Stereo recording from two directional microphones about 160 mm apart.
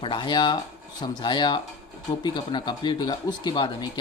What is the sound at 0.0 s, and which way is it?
A man's voice, 30° left (ahead or behind).